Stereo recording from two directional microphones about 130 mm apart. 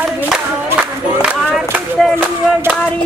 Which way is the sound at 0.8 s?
10° right (ahead or behind).